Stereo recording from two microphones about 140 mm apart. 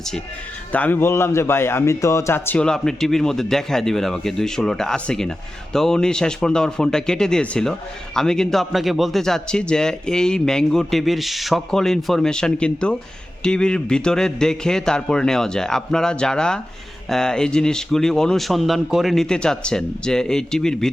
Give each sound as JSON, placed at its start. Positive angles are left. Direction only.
{"t": 0.7, "sound": "speech", "side_deg": 10}